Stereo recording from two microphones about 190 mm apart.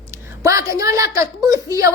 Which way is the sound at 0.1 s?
15° right (ahead or behind).